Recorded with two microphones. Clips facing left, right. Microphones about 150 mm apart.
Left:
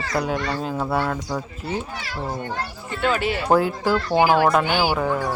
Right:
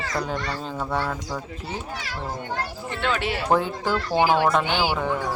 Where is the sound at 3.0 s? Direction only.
Centre (ahead or behind).